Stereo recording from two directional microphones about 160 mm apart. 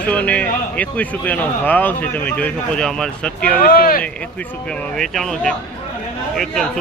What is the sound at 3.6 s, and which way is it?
Speech, 65° left (ahead or behind).